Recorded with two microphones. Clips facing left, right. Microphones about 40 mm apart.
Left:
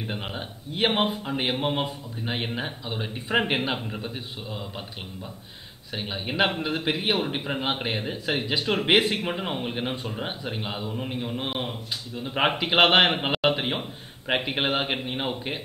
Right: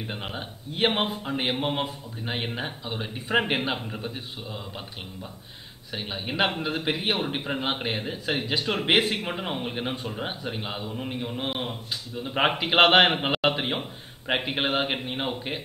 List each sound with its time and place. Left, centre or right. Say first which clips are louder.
0.0 s a man's voice: left 1 dB; centre
5.9 s a man's voice: left 1 dB; centre